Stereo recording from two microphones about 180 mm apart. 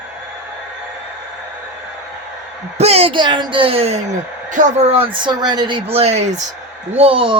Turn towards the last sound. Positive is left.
turn(degrees=-30)  # may be behind; listen again after turning